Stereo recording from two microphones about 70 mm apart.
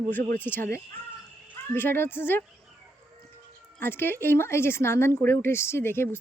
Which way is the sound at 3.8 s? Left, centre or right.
Left.